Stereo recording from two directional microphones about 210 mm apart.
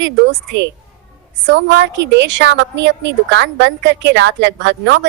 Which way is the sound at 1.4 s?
55° right (ahead or behind).